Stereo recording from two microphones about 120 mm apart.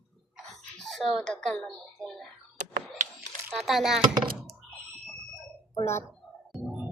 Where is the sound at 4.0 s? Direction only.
40° right (ahead or behind).